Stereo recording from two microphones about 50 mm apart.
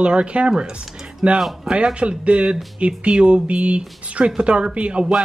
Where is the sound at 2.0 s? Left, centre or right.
Right.